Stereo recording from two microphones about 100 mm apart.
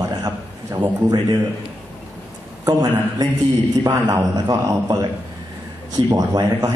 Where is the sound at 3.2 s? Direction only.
35° right (ahead or behind).